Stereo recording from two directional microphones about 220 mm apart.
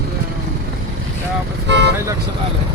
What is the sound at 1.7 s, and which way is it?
Vehicle, 50° right (ahead or behind).